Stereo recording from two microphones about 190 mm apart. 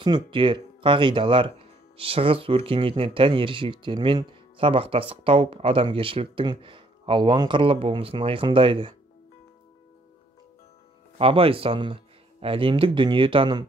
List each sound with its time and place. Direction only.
0.0 s speech: 25° right (ahead or behind)
11.1 s speech: 30° right (ahead or behind)